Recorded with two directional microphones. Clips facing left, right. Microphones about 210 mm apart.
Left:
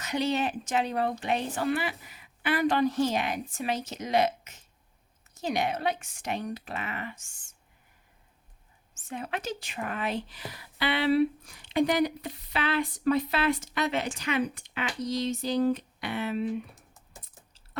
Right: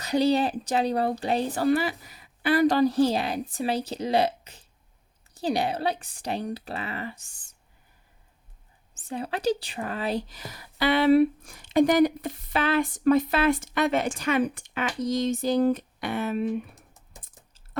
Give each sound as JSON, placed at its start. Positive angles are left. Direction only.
{"t": 0.0, "sound": "a woman's voice", "side_deg": -35}
{"t": 9.0, "sound": "speech", "side_deg": -35}